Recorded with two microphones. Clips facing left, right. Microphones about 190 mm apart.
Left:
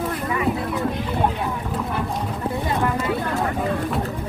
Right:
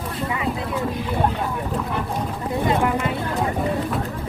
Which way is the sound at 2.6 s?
20° right (ahead or behind).